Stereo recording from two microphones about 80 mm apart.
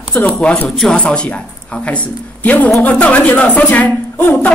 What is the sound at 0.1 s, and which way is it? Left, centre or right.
Speech, centre.